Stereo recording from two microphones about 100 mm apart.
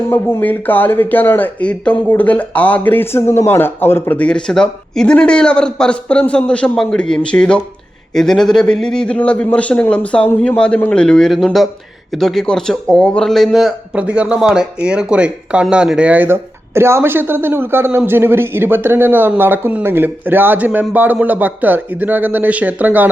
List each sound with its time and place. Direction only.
0.1 s speech: 20° left (ahead or behind); by 23.0 s 15° right (ahead or behind)